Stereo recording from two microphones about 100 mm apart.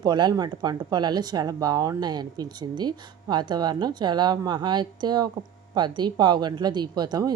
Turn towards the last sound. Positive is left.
turn(degrees=-45)  # may be behind; listen again after turning